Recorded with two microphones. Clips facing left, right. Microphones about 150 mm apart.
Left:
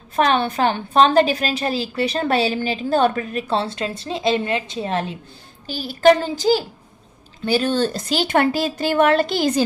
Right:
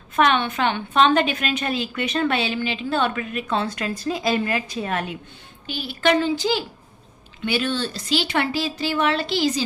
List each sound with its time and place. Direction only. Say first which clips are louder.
0.2 s a woman's voice: left 2 dB; 35° left (ahead or behind); by 9.6 s 50° left (ahead or behind)